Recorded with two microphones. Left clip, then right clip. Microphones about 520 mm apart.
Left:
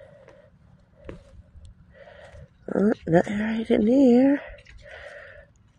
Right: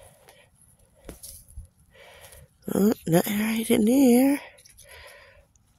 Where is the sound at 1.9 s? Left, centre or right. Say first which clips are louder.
Left 3 dB; right.